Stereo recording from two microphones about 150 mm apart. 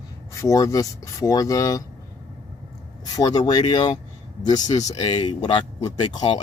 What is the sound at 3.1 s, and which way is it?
Speech, 25° left (ahead or behind).